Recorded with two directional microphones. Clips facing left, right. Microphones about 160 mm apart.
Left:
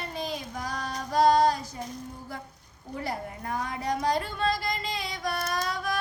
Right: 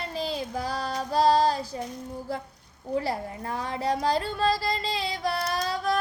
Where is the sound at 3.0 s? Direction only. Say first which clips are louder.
Right 3 dB; 30° right (ahead or behind).